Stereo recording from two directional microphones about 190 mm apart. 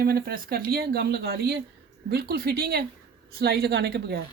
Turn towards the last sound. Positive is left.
turn(degrees=-60)  # may be behind; listen again after turning